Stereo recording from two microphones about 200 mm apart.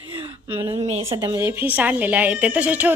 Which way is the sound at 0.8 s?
35° right (ahead or behind).